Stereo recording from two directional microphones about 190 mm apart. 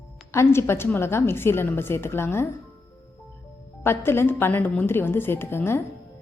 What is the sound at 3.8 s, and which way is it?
A woman's voice, 10° left (ahead or behind).